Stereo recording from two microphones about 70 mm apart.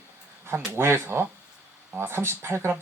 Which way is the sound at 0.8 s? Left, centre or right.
Right.